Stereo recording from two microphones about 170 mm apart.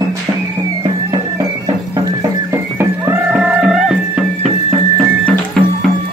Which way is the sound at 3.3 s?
5° right (ahead or behind).